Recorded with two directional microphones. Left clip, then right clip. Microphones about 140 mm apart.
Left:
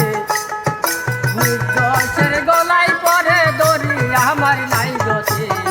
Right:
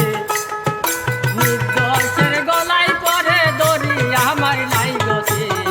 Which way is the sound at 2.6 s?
30° right (ahead or behind).